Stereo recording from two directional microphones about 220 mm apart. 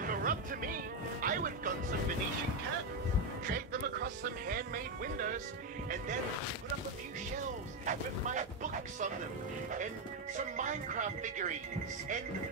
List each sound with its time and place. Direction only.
0.0 s music: 40° right (ahead or behind)
3.4 s music: 40° right (ahead or behind)
5.1 s speech: 40° right (ahead or behind)
7.8 s speech: 35° right (ahead or behind)
10.3 s speech: 35° right (ahead or behind)